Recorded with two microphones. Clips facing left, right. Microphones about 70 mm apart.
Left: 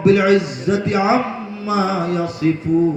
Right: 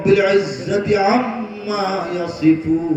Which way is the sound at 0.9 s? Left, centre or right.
Left.